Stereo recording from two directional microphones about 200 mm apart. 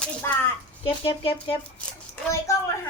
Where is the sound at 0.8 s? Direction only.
25° left (ahead or behind).